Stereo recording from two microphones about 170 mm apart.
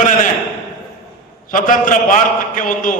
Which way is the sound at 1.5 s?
50° left (ahead or behind).